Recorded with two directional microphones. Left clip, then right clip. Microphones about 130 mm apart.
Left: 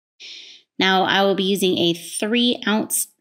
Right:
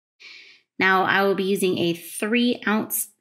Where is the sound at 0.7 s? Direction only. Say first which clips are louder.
Left 2 dB; 40° left (ahead or behind).